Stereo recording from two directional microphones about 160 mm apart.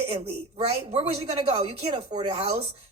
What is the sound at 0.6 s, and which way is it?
Speech, 40° right (ahead or behind).